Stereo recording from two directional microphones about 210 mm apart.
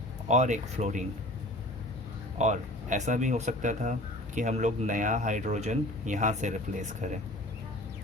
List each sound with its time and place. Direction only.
0.3 s speech: 35° right (ahead or behind)
2.4 s speech: 35° right (ahead or behind)